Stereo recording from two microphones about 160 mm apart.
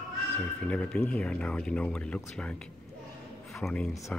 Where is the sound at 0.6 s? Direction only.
5° left (ahead or behind).